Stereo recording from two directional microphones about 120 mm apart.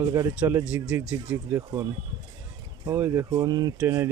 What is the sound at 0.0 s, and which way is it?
Speech, 25° right (ahead or behind).